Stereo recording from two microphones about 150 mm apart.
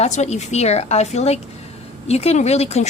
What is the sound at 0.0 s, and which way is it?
A woman's voice, 50° left (ahead or behind).